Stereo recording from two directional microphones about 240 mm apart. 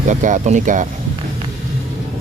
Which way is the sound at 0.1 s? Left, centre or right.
Right.